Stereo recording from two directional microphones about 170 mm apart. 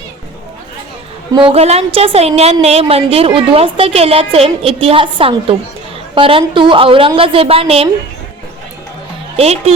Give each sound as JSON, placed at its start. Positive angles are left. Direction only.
{"t": 1.3, "sound": "a woman's voice", "side_deg": -30}
{"t": 9.4, "sound": "a woman's voice", "side_deg": -35}